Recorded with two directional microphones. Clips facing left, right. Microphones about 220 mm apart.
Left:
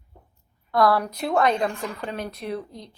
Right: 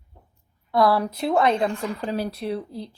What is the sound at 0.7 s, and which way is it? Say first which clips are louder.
Speech: right 1 dB; 25° right (ahead or behind).